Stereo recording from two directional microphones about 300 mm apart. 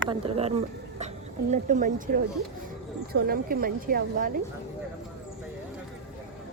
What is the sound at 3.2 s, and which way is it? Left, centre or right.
A woman's voice, right.